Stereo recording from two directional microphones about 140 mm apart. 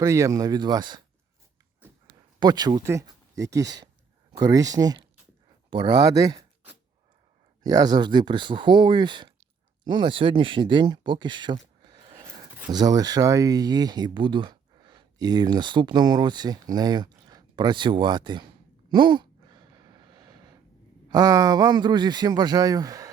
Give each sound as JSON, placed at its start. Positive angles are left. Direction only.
{"t": 0.0, "sound": "speech", "side_deg": -20}
{"t": 2.4, "sound": "speech", "side_deg": -30}
{"t": 7.6, "sound": "speech", "side_deg": -30}
{"t": 11.8, "sound": "a sound", "side_deg": -30}
{"t": 12.7, "sound": "speech", "side_deg": -25}
{"t": 18.9, "sound": "sigh", "side_deg": -35}
{"t": 21.1, "sound": "speech", "side_deg": -25}